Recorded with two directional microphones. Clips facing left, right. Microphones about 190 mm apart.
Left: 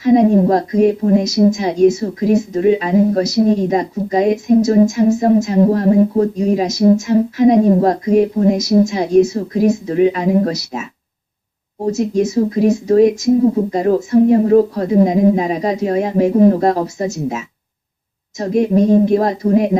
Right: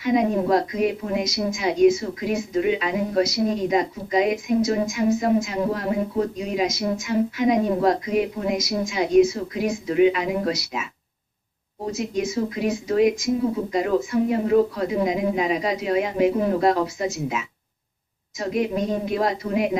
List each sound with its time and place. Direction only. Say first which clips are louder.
0.0 s a woman's voice: left 9 dB; 40° left (ahead or behind)
11.9 s a woman's voice: left 9 dB; 40° left (ahead or behind)